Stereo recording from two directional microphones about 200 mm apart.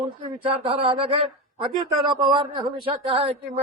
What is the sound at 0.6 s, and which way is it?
Speech, 30° right (ahead or behind).